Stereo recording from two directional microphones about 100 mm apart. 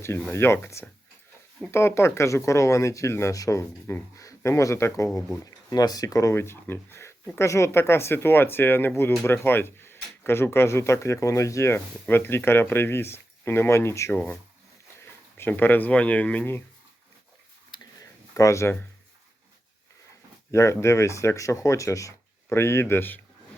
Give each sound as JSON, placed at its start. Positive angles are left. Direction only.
{"t": 0.3, "sound": "speech", "side_deg": 25}
{"t": 5.7, "sound": "speech", "side_deg": 40}
{"t": 6.3, "sound": "speech", "side_deg": 25}
{"t": 15.4, "sound": "speech", "side_deg": 20}
{"t": 17.7, "sound": "a sound", "side_deg": 50}
{"t": 18.3, "sound": "speech", "side_deg": 30}
{"t": 20.5, "sound": "speech", "side_deg": 30}